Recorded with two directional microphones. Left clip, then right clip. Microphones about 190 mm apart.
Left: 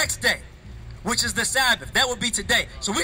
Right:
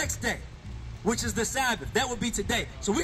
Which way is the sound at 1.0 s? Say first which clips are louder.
Left 5 dB; 25° left (ahead or behind).